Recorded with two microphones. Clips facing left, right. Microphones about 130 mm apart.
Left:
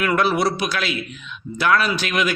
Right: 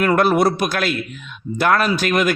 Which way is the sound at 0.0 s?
45° right (ahead or behind).